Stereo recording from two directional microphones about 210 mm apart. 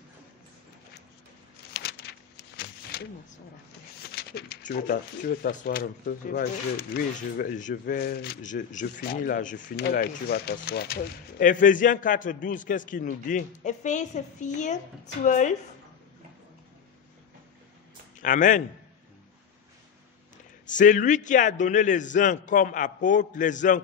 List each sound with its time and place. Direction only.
1.7 s a sound: 50° left (ahead or behind)
4.0 s speech: 50° left (ahead or behind)
18.2 s speech: 40° left (ahead or behind)
20.6 s speech: 35° left (ahead or behind)